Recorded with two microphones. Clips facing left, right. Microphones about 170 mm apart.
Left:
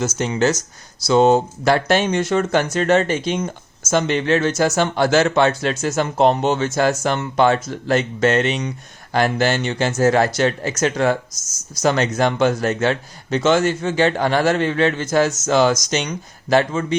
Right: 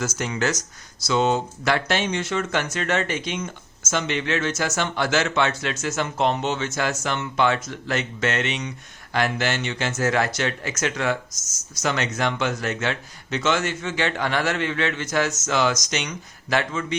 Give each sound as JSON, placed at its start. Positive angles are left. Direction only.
{"t": 0.2, "sound": "speech", "side_deg": 25}
{"t": 1.0, "sound": "speech", "side_deg": 35}